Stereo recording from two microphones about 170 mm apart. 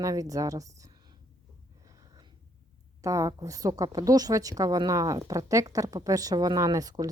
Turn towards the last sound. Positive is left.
turn(degrees=-20)  # may be behind; listen again after turning